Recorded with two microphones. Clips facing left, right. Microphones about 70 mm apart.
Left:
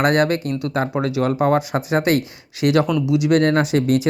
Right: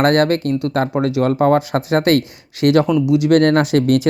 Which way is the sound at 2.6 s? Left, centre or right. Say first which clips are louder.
Right 4 dB; right.